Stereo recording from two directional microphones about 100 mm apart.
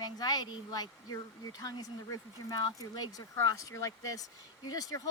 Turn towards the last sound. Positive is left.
turn(degrees=40)  # may be behind; listen again after turning